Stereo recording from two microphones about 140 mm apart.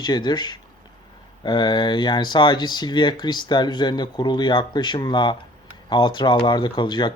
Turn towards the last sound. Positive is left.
turn(degrees=30)  # may be behind; listen again after turning